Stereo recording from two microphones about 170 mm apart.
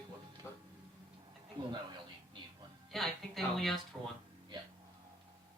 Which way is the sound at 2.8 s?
Centre (ahead or behind).